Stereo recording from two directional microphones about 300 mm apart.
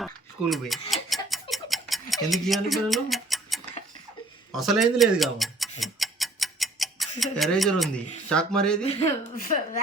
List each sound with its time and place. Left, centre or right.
0.0 s tick-tock: centre
8.3 s speech: centre
8.8 s a woman's voice: centre